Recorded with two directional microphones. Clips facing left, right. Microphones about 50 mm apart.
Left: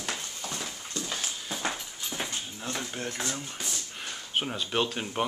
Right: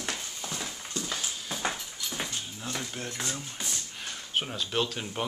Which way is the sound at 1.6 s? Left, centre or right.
Centre.